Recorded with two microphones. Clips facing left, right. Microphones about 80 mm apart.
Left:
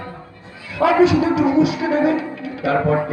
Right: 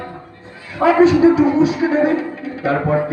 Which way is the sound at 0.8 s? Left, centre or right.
Right.